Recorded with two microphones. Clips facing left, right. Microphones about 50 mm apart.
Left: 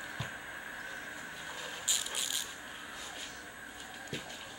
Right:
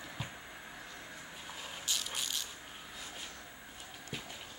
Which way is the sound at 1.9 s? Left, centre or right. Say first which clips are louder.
Right 1 dB; centre.